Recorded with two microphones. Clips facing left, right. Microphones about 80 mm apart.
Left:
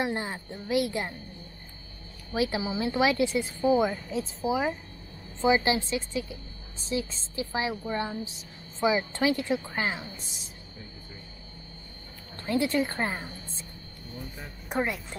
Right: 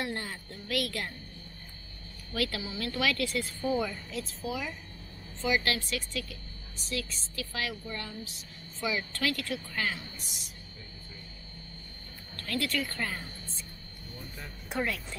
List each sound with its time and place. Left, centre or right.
0.0 s speech: left
2.3 s speech: left
12.4 s a woman's voice: left
14.8 s speech: left